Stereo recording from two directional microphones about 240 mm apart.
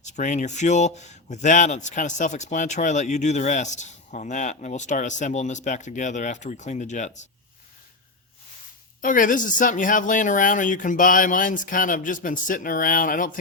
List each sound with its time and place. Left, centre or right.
0.0 s speech: left
9.0 s speech: left